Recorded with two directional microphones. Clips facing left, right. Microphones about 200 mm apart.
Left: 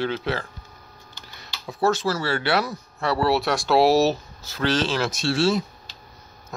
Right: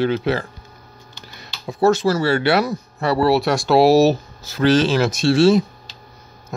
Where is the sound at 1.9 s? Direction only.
15° right (ahead or behind).